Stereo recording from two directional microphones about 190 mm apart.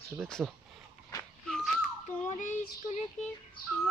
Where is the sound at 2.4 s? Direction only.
40° left (ahead or behind).